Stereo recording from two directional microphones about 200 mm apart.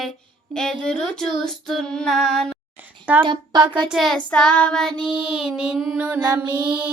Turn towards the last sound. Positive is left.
turn(degrees=-15)  # may be behind; listen again after turning